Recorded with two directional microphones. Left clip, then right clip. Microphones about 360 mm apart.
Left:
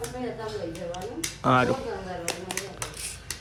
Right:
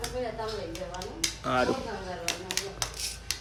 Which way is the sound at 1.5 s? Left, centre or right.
Centre.